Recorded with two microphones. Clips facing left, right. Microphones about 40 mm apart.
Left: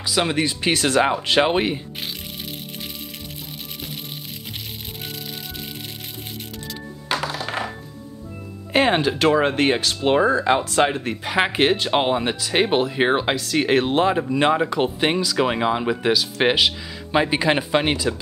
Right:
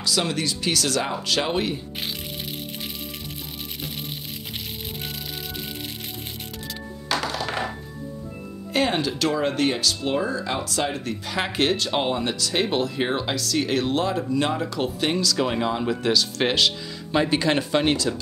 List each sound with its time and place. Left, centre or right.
0.0 s speech: left
7.2 s music: centre
8.7 s speech: left; by 18.1 s centre